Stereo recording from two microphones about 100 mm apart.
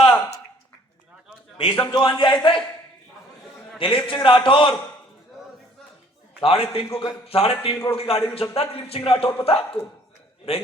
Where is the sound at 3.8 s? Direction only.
65° left (ahead or behind).